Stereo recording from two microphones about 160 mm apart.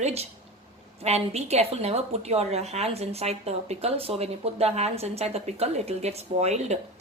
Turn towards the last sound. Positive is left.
turn(degrees=-45)  # may be behind; listen again after turning